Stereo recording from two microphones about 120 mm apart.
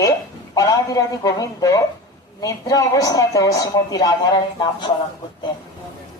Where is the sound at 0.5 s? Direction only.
30° left (ahead or behind).